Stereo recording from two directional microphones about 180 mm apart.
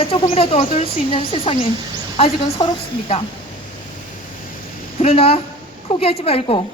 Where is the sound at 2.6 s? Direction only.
25° left (ahead or behind).